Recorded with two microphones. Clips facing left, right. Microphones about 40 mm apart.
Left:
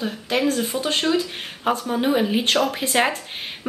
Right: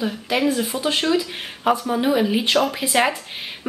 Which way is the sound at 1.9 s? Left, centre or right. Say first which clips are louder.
Right 1 dB; centre.